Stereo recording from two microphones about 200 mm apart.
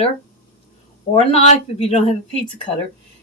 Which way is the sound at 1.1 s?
30° left (ahead or behind).